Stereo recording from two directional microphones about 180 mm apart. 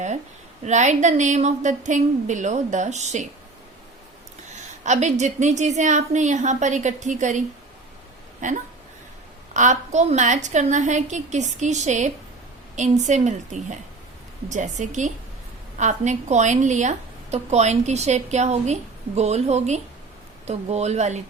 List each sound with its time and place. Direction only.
0.6 s a woman's voice: 40° right (ahead or behind)
4.5 s a woman's voice: 40° right (ahead or behind)